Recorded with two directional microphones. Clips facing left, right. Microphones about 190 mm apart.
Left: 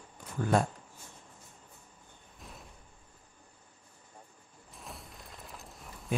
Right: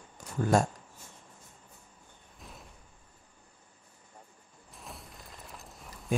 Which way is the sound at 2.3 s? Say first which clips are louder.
Even; centre (ahead or behind).